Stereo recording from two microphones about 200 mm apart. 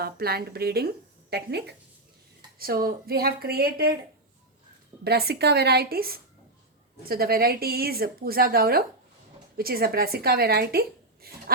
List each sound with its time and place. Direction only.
0.0 s a woman's voice: 50° right (ahead or behind)
5.0 s a woman's voice: 55° right (ahead or behind)